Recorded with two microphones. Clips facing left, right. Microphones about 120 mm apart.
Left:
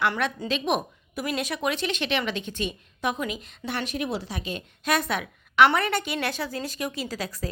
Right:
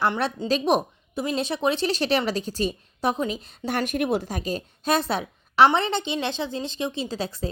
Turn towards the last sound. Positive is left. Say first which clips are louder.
# right 3 dB
turn(degrees=-25)  # may be behind; listen again after turning